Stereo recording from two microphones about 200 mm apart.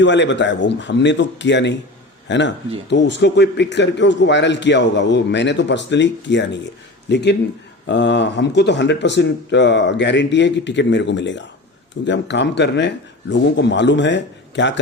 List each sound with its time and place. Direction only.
0.0 s a man's voice: 60° left (ahead or behind)